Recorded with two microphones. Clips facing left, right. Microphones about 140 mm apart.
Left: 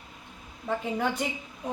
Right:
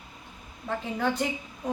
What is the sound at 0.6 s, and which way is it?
Speech, 10° left (ahead or behind).